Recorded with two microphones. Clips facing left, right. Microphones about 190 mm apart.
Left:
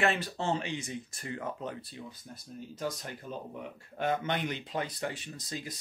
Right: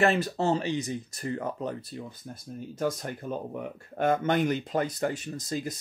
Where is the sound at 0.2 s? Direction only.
40° right (ahead or behind).